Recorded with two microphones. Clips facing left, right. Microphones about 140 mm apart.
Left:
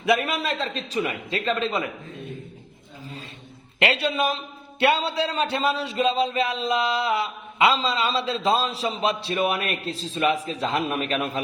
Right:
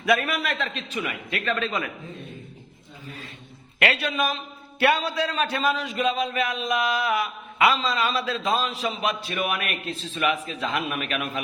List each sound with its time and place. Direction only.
0.0 s a man's voice: 25° left (ahead or behind)
3.8 s a man's voice: 25° left (ahead or behind)